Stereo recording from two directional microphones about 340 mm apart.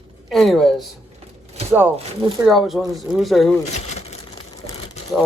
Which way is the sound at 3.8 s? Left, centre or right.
Centre.